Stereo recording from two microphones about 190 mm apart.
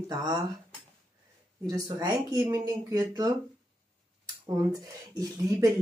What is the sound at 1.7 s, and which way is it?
Speech, 20° right (ahead or behind).